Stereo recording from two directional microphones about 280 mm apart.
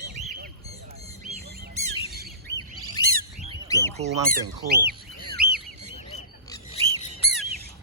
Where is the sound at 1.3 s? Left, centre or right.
Right.